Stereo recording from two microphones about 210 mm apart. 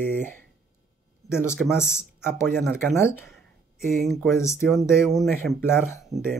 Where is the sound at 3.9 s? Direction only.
Centre (ahead or behind).